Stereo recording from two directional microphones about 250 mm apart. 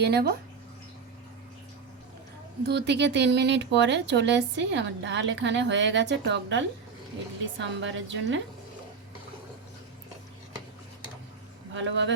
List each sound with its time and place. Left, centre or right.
0.0 s speech: right
2.6 s speech: right
11.7 s speech: right